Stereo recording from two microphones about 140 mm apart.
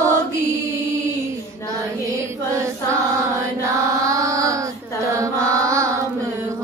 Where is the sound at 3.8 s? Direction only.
20° right (ahead or behind).